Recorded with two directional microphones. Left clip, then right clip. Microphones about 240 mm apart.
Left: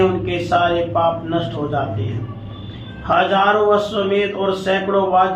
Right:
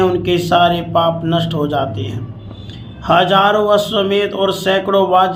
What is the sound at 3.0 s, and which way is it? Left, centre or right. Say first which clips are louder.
A man's voice: right 4 dB; right.